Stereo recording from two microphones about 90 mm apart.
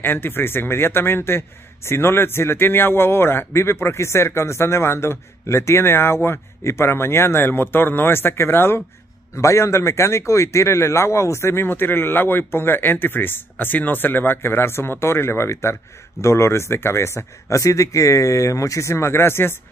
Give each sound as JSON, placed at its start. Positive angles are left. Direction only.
{"t": 0.0, "sound": "speech", "side_deg": 25}